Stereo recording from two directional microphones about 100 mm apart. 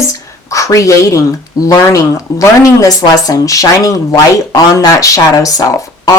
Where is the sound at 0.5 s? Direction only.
35° left (ahead or behind).